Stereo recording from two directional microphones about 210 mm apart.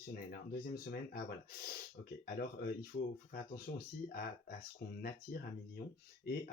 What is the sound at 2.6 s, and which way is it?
Speech, 45° left (ahead or behind).